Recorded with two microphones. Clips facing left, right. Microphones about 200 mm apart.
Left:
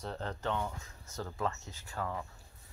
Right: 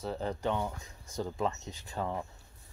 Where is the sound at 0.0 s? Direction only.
10° right (ahead or behind).